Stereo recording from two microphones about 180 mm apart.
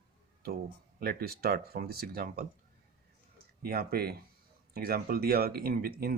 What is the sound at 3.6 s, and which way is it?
Speech, 60° right (ahead or behind).